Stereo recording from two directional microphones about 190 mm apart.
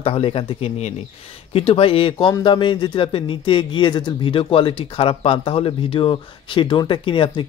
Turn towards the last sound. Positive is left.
turn(degrees=25)  # may be behind; listen again after turning